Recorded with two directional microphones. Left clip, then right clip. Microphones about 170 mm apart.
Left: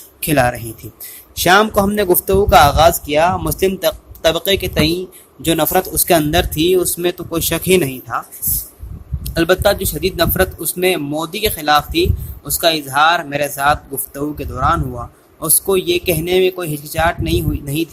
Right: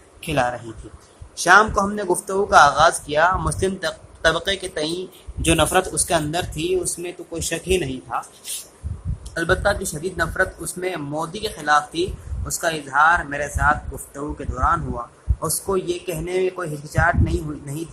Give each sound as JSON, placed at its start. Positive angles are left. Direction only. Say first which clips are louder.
{"t": 0.2, "sound": "speech", "louder": "left 7 dB", "side_deg": 50}
{"t": 5.5, "sound": "a man's voice", "louder": "left 2 dB", "side_deg": 30}
{"t": 6.1, "sound": "speech", "louder": "left 8 dB", "side_deg": 50}
{"t": 9.2, "sound": "speech", "louder": "left 6 dB", "side_deg": 50}